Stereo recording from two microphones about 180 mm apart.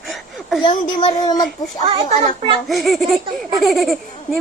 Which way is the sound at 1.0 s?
25° left (ahead or behind).